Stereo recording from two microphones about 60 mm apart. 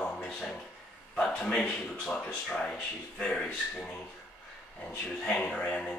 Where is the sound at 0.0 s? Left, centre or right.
Centre.